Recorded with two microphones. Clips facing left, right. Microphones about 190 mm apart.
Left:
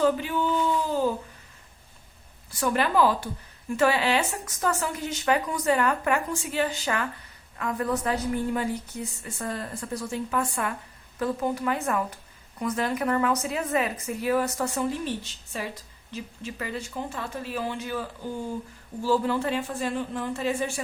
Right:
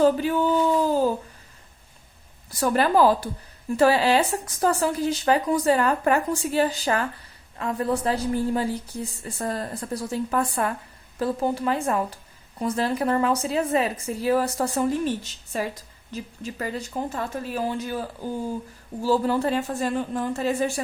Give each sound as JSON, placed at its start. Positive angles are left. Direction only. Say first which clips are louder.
{"t": 0.0, "sound": "speech", "louder": "right 4 dB", "side_deg": -40}
{"t": 2.5, "sound": "speech", "louder": "right 4 dB", "side_deg": -40}
{"t": 14.8, "sound": "speech", "louder": "right 7 dB", "side_deg": -45}
{"t": 19.0, "sound": "speech", "louder": "right 3 dB", "side_deg": -40}